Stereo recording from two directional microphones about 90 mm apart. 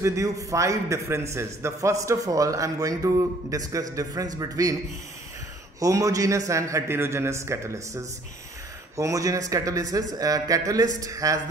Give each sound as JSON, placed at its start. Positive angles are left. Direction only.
{"t": 0.0, "sound": "a man's voice", "side_deg": -35}
{"t": 5.8, "sound": "a man's voice", "side_deg": -40}